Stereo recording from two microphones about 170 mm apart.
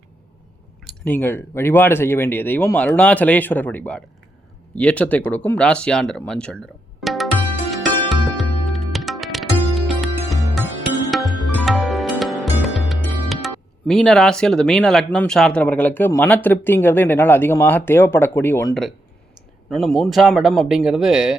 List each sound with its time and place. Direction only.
0.9 s speech: 10° left (ahead or behind)
7.0 s music: centre (ahead or behind)
12.6 s speech: centre (ahead or behind)
19.7 s speech: 5° left (ahead or behind)